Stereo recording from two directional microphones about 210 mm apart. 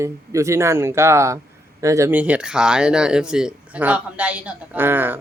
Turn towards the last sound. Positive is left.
turn(degrees=-10)  # may be behind; listen again after turning